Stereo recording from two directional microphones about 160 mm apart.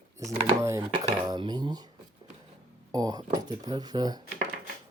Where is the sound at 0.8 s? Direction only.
30° right (ahead or behind).